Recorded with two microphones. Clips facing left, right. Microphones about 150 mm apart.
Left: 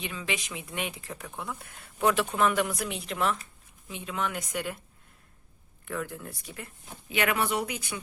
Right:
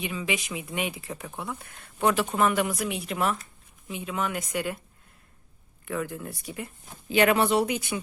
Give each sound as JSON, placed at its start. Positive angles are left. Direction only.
{"t": 0.0, "sound": "speech", "side_deg": -10}
{"t": 5.8, "sound": "speech", "side_deg": -5}
{"t": 7.1, "sound": "speech", "side_deg": -30}